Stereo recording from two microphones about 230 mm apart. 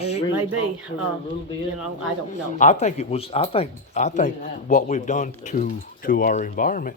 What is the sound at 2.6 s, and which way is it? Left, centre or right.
Speech, left.